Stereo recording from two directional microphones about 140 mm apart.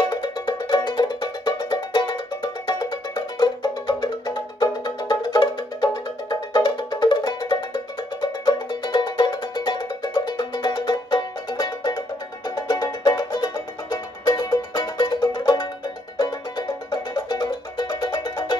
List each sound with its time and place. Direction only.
0.1 s music: 30° left (ahead or behind)